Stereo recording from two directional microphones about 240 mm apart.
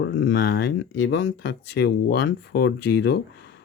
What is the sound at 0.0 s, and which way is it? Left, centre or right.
Speech, left.